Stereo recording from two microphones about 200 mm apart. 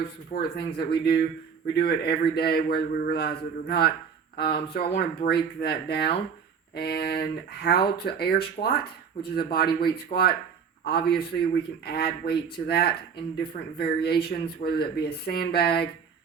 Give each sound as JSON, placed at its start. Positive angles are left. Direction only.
{"t": 0.3, "sound": "a man's voice", "side_deg": 50}